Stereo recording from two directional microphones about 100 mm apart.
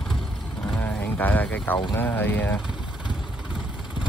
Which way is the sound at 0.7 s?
20° left (ahead or behind).